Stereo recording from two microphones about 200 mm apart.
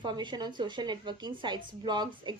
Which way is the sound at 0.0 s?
25° right (ahead or behind).